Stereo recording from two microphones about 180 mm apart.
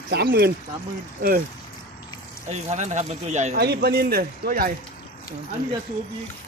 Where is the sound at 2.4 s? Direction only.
40° right (ahead or behind).